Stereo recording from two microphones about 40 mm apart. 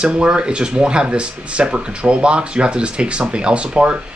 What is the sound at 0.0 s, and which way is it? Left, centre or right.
Speech, right.